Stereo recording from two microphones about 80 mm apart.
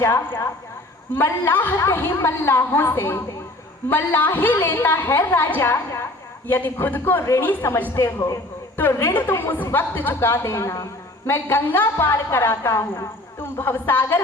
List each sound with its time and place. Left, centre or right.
0.0 s a woman's voice: left
7.9 s a woman's voice: left